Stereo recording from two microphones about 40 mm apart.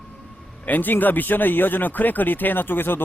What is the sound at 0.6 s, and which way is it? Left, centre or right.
Speech, left.